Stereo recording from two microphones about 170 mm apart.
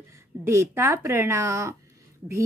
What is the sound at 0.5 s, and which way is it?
Speech, 15° right (ahead or behind).